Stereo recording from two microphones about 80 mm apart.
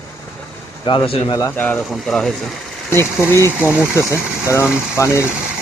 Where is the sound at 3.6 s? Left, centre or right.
Left.